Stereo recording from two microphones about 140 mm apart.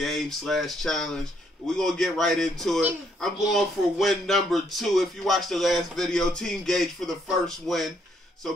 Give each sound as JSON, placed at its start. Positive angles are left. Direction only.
{"t": 0.0, "sound": "speech", "side_deg": 0}